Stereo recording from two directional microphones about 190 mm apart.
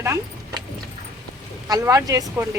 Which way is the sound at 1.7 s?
15° right (ahead or behind).